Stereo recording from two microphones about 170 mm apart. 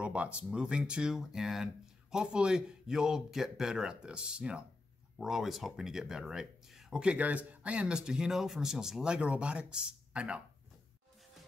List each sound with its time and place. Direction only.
0.0 s speech: 5° right (ahead or behind)